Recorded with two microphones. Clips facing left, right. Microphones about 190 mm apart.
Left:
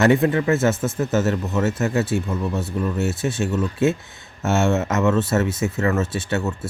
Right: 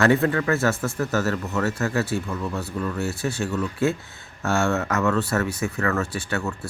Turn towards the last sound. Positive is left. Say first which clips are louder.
# left 4 dB
turn(degrees=20)  # may be behind; listen again after turning